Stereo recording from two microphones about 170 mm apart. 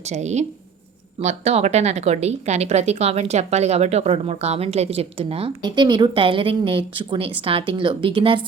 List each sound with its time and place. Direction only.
0.0 s speech: 40° right (ahead or behind)